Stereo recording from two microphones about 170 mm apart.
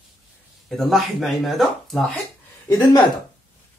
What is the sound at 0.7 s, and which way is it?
Speech, centre (ahead or behind).